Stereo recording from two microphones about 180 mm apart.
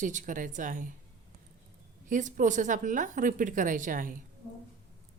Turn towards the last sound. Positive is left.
turn(degrees=-50)  # may be behind; listen again after turning